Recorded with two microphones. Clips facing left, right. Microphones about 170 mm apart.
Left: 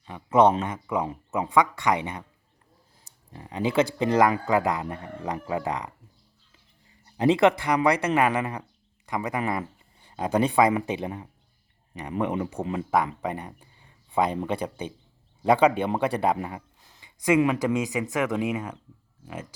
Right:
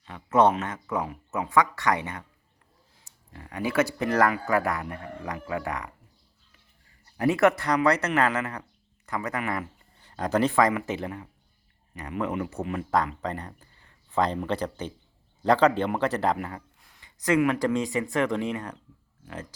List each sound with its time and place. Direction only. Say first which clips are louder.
0.0 s speech: left 2 dB; 15° left (ahead or behind)
3.3 s speech: left 2 dB; 20° left (ahead or behind)
7.2 s speech: left 2 dB; 15° left (ahead or behind)
12.6 s speech: left 1 dB; 25° left (ahead or behind)
13.2 s speech: left 2 dB; 10° left (ahead or behind)